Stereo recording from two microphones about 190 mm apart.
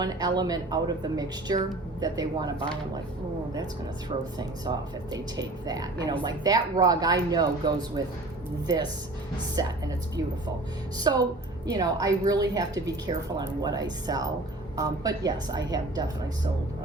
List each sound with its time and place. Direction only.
0.0 s a woman's voice: 20° right (ahead or behind)
4.1 s a woman's voice: 30° right (ahead or behind)
10.9 s a woman's voice: 20° right (ahead or behind)